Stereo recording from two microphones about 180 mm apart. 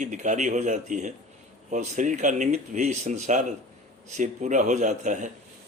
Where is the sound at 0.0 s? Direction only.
40° right (ahead or behind).